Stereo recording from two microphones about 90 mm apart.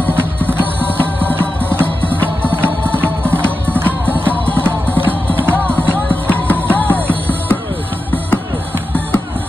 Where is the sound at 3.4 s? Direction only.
15° left (ahead or behind).